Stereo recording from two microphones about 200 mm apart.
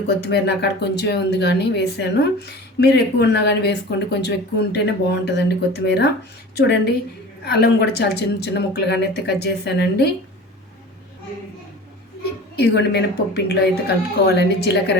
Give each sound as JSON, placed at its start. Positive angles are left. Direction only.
{"t": 0.2, "sound": "a woman's voice", "side_deg": 55}
{"t": 12.5, "sound": "a woman's voice", "side_deg": 55}